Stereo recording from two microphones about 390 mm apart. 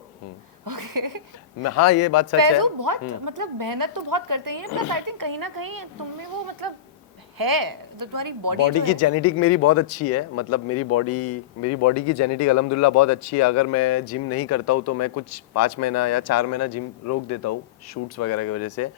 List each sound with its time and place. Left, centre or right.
0.6 s speech: right
1.6 s speech: left
2.4 s speech: right
8.8 s speech: left